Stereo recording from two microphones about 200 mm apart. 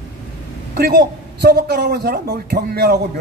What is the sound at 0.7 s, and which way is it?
A man's voice, 50° right (ahead or behind).